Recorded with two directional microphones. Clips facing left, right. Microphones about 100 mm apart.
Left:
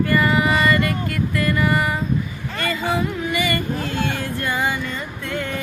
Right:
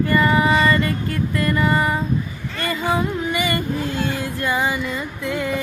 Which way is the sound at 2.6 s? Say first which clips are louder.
Right 1 dB; 25° right (ahead or behind).